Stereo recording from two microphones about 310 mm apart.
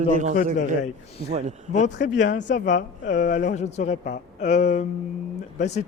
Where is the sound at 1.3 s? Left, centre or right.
Right.